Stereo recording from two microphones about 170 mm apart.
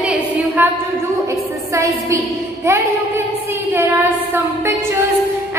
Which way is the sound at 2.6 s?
15° right (ahead or behind).